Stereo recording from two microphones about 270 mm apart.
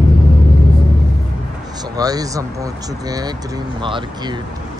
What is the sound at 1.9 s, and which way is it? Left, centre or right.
Speech, centre.